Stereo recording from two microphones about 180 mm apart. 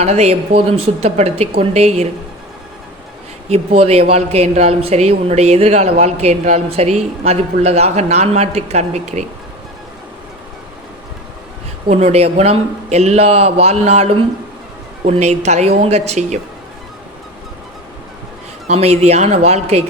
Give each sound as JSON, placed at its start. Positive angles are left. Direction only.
{"t": 0.0, "sound": "speech", "side_deg": -35}
{"t": 3.5, "sound": "speech", "side_deg": -35}
{"t": 11.9, "sound": "speech", "side_deg": -35}
{"t": 18.7, "sound": "speech", "side_deg": -35}